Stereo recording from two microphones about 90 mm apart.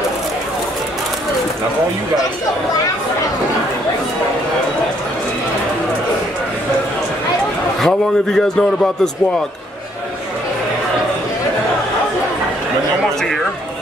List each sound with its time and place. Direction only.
8.4 s speech: 5° left (ahead or behind)